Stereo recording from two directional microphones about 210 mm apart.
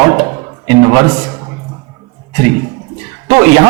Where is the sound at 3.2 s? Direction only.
10° right (ahead or behind).